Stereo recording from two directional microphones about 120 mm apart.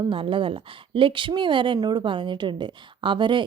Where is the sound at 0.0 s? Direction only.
45° right (ahead or behind).